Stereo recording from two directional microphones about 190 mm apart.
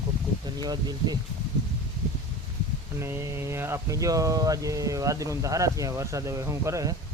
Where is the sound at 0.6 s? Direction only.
20° right (ahead or behind).